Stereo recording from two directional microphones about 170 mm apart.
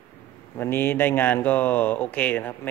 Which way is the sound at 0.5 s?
15° left (ahead or behind).